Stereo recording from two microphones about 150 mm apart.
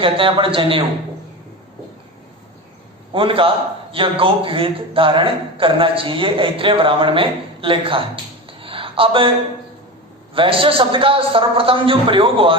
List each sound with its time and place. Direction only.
0.0 s a man's voice: 35° right (ahead or behind)
3.1 s a man's voice: 35° right (ahead or behind)
8.4 s a sound: 35° right (ahead or behind)
10.3 s a man's voice: 35° right (ahead or behind)